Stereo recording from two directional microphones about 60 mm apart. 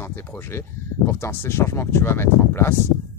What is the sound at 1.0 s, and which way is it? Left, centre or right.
Speech, left.